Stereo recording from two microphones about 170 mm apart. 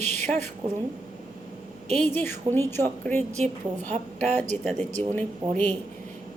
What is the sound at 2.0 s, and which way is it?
A woman's voice, 10° left (ahead or behind).